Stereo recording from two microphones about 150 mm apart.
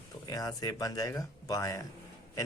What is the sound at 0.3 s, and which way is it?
Speech, 25° left (ahead or behind).